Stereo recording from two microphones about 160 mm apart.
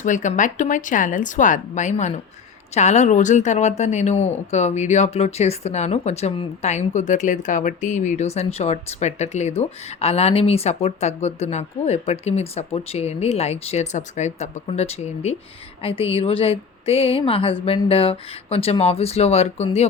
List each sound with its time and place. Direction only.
0.0 s a woman's voice: 50° left (ahead or behind)